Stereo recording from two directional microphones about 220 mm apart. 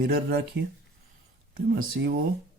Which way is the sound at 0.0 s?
45° right (ahead or behind).